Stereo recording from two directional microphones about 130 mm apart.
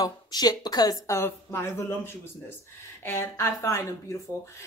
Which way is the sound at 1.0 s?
20° left (ahead or behind).